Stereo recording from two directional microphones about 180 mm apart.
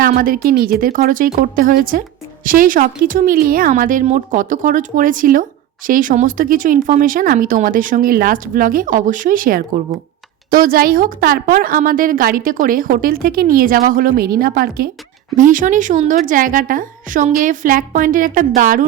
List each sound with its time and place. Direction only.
0.2 s speech: 50° right (ahead or behind)